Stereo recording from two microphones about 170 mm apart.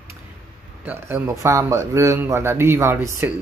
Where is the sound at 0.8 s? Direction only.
15° right (ahead or behind).